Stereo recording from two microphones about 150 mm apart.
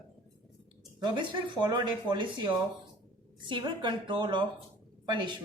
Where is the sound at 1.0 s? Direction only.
30° right (ahead or behind).